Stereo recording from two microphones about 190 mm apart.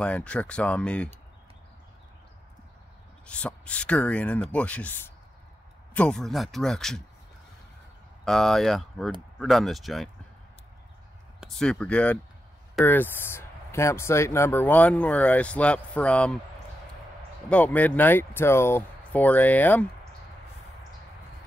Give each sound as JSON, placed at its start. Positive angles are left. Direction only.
{"t": 0.0, "sound": "speech", "side_deg": 5}
{"t": 3.3, "sound": "speech", "side_deg": 5}
{"t": 8.3, "sound": "speech", "side_deg": 0}
{"t": 11.4, "sound": "speech", "side_deg": 5}
{"t": 17.5, "sound": "speech", "side_deg": 5}